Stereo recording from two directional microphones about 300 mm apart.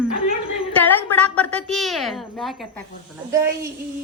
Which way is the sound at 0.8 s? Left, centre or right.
Centre.